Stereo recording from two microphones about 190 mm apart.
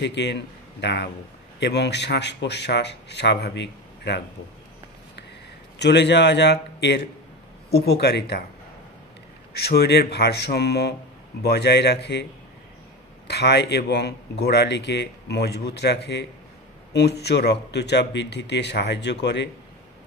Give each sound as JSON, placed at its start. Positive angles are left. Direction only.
{"t": 0.0, "sound": "a man's voice", "side_deg": 65}
{"t": 5.8, "sound": "a man's voice", "side_deg": 65}
{"t": 9.5, "sound": "a man's voice", "side_deg": 60}
{"t": 13.3, "sound": "a man's voice", "side_deg": 60}